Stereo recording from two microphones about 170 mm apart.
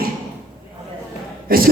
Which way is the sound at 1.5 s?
60° right (ahead or behind).